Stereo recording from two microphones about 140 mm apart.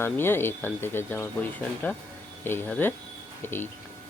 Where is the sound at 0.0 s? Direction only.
15° left (ahead or behind).